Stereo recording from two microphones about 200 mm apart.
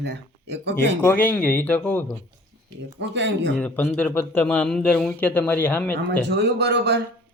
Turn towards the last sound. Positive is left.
turn(degrees=-55)  # may be behind; listen again after turning